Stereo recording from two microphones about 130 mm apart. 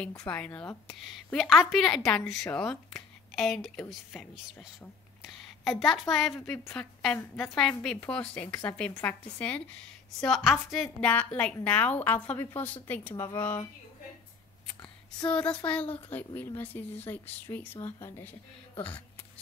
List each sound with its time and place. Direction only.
0.3 s a woman's voice: 10° left (ahead or behind)
15.2 s a woman's voice: 10° left (ahead or behind)
17.9 s speech: 30° left (ahead or behind)